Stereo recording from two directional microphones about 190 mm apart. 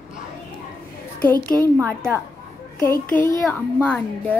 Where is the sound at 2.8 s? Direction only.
10° left (ahead or behind).